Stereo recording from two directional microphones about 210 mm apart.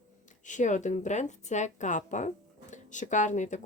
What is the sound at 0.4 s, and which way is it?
Speech, 35° left (ahead or behind).